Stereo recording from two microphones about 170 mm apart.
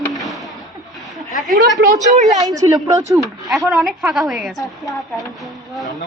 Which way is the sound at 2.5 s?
20° right (ahead or behind).